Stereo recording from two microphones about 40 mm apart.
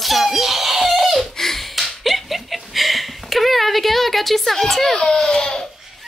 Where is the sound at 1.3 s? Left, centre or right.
Centre.